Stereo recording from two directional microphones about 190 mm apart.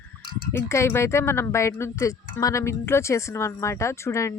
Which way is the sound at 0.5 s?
15° left (ahead or behind).